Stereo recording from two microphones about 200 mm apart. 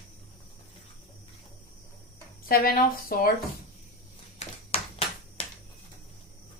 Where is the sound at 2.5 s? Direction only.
45° left (ahead or behind).